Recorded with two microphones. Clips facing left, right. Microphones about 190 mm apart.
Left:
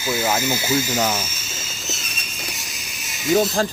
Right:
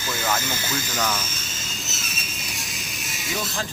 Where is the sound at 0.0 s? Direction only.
10° left (ahead or behind).